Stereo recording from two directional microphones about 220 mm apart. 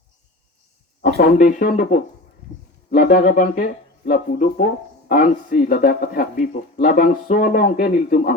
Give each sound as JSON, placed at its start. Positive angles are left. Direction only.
{"t": 1.0, "sound": "speech", "side_deg": 40}